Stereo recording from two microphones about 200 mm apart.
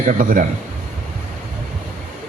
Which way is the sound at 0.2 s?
40° right (ahead or behind).